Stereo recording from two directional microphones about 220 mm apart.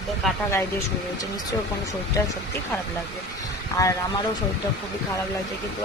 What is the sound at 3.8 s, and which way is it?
Speech, 15° left (ahead or behind).